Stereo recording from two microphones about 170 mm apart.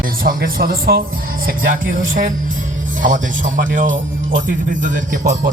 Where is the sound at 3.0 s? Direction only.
50° right (ahead or behind).